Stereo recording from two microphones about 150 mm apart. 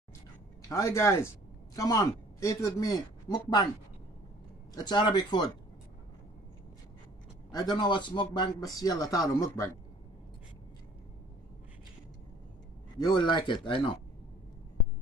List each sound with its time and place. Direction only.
0.7 s speech: 20° left (ahead or behind)
4.7 s speech: 30° left (ahead or behind)
7.5 s speech: 30° left (ahead or behind)
13.0 s speech: 30° left (ahead or behind)